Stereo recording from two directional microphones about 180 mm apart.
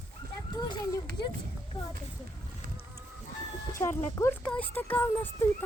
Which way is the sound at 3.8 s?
10° left (ahead or behind).